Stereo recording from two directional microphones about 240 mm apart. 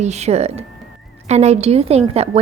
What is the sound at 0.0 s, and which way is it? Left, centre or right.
A woman's voice, right.